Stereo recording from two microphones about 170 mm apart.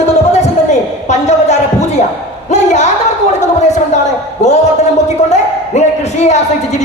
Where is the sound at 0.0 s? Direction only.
40° left (ahead or behind).